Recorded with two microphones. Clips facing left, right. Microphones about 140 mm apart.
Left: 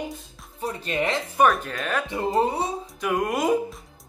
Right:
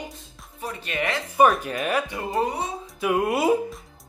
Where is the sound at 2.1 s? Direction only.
25° left (ahead or behind).